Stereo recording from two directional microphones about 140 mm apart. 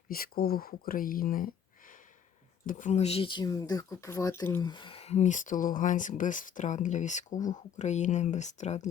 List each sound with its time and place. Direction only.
0.1 s speech: 90° left; by 4.6 s 20° left (ahead or behind)
4.6 s speech: 35° left (ahead or behind); by 8.9 s 55° left (ahead or behind)